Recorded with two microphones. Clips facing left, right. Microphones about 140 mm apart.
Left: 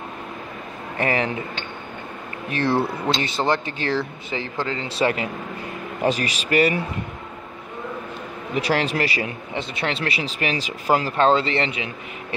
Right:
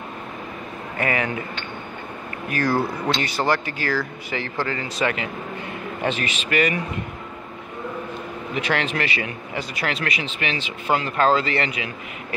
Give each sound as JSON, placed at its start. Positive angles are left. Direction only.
{"t": 0.9, "sound": "speech", "side_deg": 30}
{"t": 2.5, "sound": "speech", "side_deg": 25}
{"t": 4.8, "sound": "speech", "side_deg": 30}
{"t": 8.5, "sound": "speech", "side_deg": 35}